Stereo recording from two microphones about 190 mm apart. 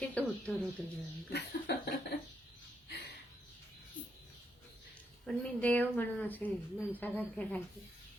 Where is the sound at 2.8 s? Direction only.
60° left (ahead or behind).